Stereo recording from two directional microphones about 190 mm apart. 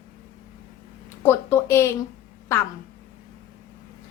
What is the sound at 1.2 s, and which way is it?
Speech, 15° left (ahead or behind).